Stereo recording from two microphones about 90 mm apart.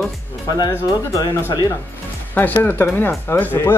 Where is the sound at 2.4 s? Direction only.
20° left (ahead or behind).